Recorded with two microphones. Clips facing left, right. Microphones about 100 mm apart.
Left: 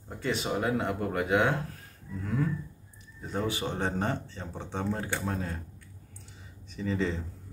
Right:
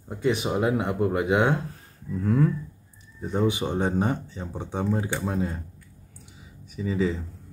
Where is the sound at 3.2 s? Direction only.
20° right (ahead or behind).